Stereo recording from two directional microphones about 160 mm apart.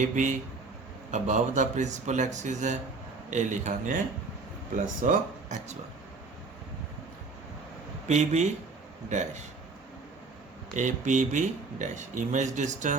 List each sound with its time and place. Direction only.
0.0 s speech: 50° right (ahead or behind)
5.0 s speech: 50° right (ahead or behind)
8.0 s speech: 45° right (ahead or behind)
10.8 s speech: 50° right (ahead or behind)